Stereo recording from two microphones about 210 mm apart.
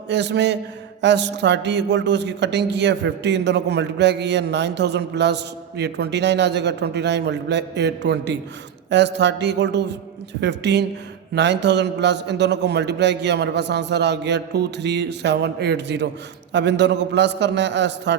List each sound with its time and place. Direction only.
0.1 s a man's voice: 55° right (ahead or behind)